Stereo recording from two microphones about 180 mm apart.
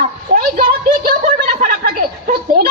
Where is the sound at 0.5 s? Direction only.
50° right (ahead or behind).